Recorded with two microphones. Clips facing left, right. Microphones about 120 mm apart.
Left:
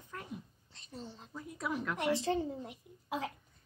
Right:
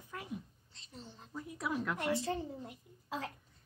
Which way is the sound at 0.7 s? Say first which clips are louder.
Left 5 dB; 50° left (ahead or behind).